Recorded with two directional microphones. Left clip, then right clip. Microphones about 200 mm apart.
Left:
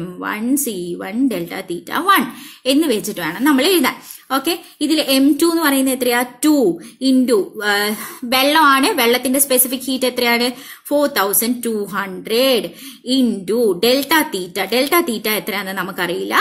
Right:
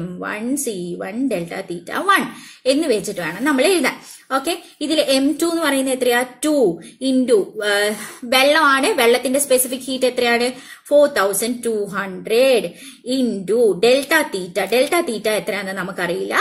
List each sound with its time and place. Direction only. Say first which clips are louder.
0.2 s a woman's voice: left 3 dB; 40° left (ahead or behind)